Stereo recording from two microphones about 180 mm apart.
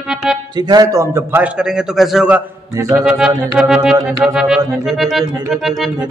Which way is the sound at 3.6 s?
5° right (ahead or behind).